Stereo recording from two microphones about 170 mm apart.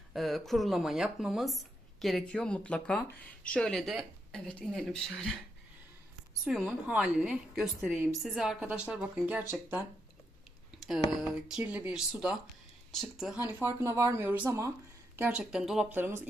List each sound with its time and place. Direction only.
0.1 s speech: centre (ahead or behind)
6.4 s speech: 5° right (ahead or behind)
10.8 s a sound: centre (ahead or behind)
11.1 s speech: centre (ahead or behind)